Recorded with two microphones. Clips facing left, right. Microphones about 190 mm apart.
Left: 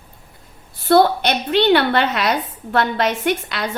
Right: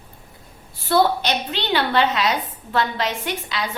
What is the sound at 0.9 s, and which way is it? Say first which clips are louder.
A woman's voice: left 4 dB; 50° left (ahead or behind).